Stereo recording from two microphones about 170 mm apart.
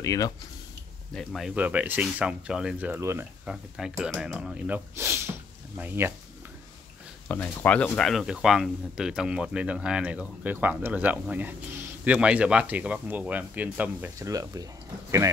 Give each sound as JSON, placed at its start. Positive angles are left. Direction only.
{"t": 0.0, "sound": "speech", "side_deg": 20}
{"t": 1.1, "sound": "speech", "side_deg": 0}
{"t": 3.4, "sound": "speech", "side_deg": -5}
{"t": 7.2, "sound": "speech", "side_deg": 10}